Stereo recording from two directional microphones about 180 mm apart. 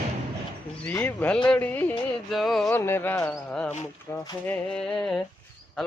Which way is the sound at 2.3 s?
Centre (ahead or behind).